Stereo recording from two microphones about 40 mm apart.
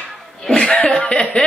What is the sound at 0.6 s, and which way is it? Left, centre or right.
Speech, left.